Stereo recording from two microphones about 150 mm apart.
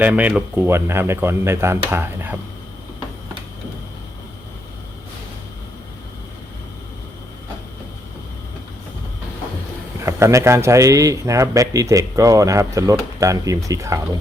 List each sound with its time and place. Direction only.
0.0 s speech: 10° right (ahead or behind)
10.0 s speech: 20° right (ahead or behind)